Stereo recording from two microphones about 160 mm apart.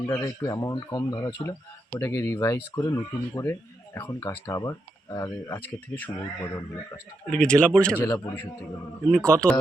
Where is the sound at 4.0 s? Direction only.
15° left (ahead or behind).